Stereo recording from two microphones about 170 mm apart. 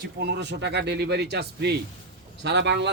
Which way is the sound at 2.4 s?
85° right.